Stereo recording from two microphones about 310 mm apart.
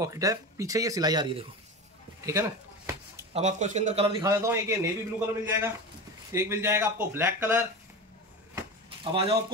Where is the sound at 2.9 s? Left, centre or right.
Centre.